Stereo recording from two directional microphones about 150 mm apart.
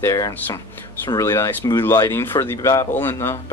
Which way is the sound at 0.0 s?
20° left (ahead or behind).